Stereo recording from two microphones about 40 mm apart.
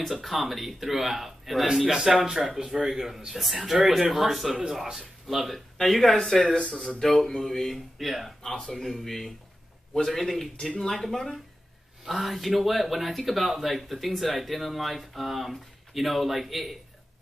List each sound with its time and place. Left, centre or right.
0.1 s speech: centre
1.9 s speech: centre